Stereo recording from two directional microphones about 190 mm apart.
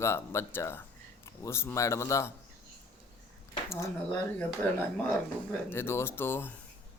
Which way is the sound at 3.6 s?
15° left (ahead or behind).